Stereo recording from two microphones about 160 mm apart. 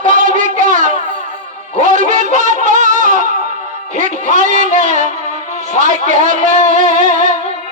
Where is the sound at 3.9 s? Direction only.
55° right (ahead or behind).